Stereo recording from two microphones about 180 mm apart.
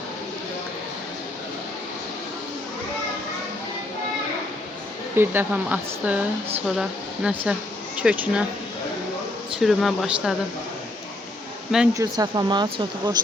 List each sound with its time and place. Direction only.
5.1 s speech: 10° right (ahead or behind)
9.6 s speech: centre (ahead or behind)
11.9 s speech: 20° right (ahead or behind)